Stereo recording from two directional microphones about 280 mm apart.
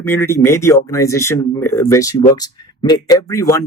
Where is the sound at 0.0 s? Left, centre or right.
Centre.